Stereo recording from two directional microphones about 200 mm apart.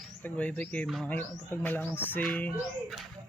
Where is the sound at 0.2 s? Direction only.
10° left (ahead or behind).